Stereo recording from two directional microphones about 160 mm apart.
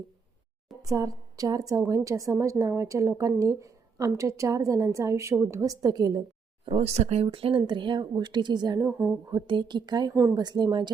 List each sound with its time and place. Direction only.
0.8 s a woman's voice: 20° right (ahead or behind)
6.7 s a woman's voice: 40° right (ahead or behind); by 9.1 s 15° right (ahead or behind)
9.3 s a woman's voice: 30° right (ahead or behind)